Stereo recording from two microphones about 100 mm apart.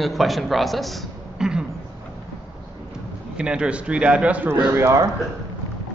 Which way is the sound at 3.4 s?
10° right (ahead or behind).